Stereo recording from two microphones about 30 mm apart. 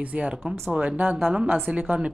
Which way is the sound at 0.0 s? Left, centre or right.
Right.